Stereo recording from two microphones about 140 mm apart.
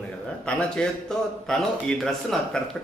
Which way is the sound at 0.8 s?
5° left (ahead or behind).